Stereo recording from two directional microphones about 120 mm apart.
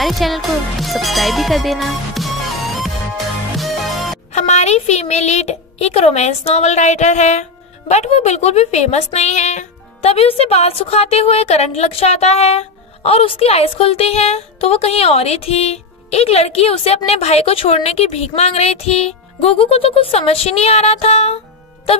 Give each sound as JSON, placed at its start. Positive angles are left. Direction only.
{"t": 0.0, "sound": "music", "side_deg": 0}
{"t": 3.5, "sound": "music", "side_deg": 0}
{"t": 4.3, "sound": "speech", "side_deg": 70}
{"t": 7.9, "sound": "a woman's voice", "side_deg": 65}